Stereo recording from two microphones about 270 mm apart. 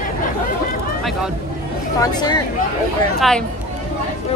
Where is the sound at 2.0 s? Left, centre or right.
Centre.